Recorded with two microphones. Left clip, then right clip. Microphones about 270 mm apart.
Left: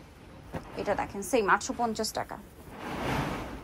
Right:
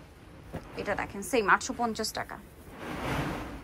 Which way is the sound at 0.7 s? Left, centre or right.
Centre.